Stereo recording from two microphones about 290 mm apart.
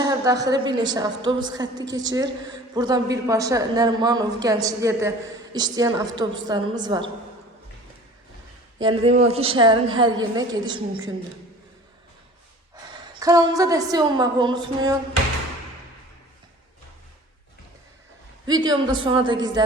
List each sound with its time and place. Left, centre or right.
0.0 s a woman's voice: centre
8.8 s a woman's voice: centre
12.7 s a woman's voice: centre
18.4 s a woman's voice: centre